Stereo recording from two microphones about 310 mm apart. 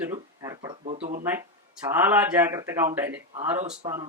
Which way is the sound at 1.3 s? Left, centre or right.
Centre.